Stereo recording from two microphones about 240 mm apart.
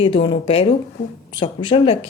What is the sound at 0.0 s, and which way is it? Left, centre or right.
A woman's voice, left.